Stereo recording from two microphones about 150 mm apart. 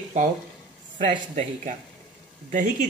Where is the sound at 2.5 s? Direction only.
60° right (ahead or behind).